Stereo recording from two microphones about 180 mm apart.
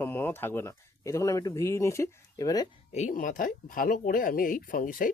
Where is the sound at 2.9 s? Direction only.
40° left (ahead or behind).